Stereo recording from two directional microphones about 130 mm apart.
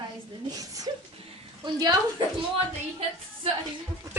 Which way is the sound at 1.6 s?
30° right (ahead or behind).